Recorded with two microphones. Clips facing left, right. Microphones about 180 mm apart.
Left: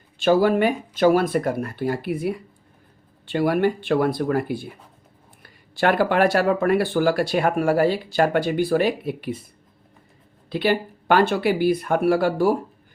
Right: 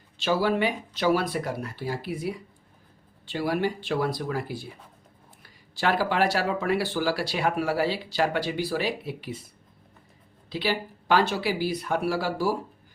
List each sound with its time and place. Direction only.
0.2 s speech: 50° left (ahead or behind)
10.5 s speech: 55° left (ahead or behind)